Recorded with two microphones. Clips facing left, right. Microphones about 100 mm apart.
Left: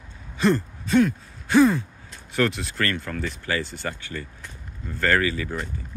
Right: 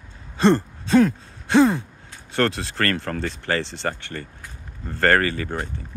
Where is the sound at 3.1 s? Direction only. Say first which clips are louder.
Right 3 dB; 45° right (ahead or behind).